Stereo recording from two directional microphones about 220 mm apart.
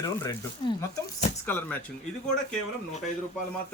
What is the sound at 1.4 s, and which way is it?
Speech, 10° left (ahead or behind).